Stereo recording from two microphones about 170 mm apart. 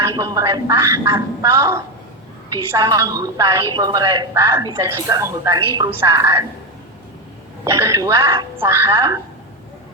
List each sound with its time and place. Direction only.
0.1 s speech: 20° right (ahead or behind)
7.6 s speech: 20° right (ahead or behind)